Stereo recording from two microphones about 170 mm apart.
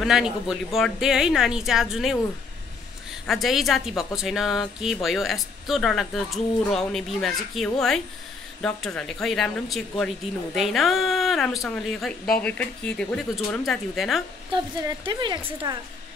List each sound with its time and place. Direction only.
0.0 s speech: centre (ahead or behind)
3.3 s speech: centre (ahead or behind)
14.5 s a woman's voice: 25° right (ahead or behind)